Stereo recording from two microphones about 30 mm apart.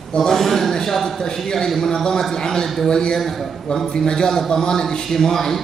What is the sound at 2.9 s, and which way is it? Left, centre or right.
Speech, left.